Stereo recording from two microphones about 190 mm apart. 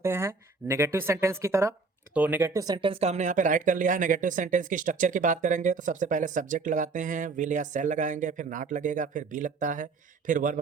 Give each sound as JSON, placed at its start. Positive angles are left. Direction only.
{"t": 0.0, "sound": "speech", "side_deg": -15}